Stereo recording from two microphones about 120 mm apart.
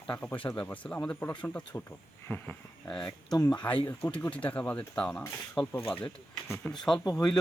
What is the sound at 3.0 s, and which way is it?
Speech, 35° left (ahead or behind).